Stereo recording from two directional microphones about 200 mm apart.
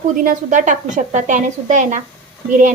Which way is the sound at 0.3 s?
40° right (ahead or behind).